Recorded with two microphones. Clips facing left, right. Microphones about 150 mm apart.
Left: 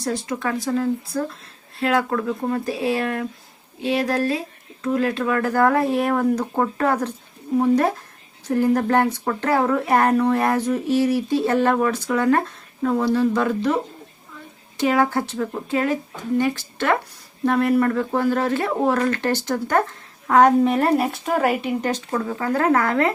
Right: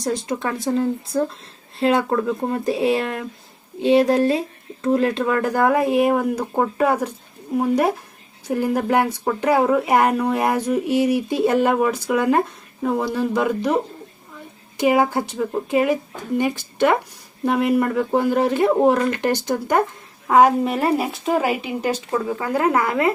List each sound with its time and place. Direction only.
0.0 s speech: 20° right (ahead or behind)
14.8 s speech: 15° right (ahead or behind)